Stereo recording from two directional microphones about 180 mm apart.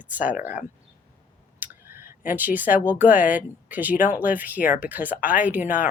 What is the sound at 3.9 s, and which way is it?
Speech, 45° left (ahead or behind).